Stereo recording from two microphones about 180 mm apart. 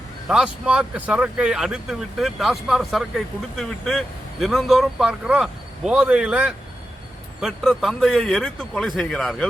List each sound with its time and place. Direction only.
0.3 s speech: 5° right (ahead or behind)